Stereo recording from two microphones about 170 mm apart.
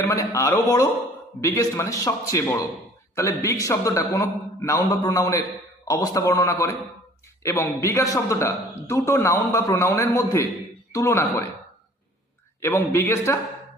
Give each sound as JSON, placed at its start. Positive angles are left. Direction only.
{"t": 0.1, "sound": "a man's voice", "side_deg": 20}
{"t": 12.6, "sound": "a man's voice", "side_deg": 15}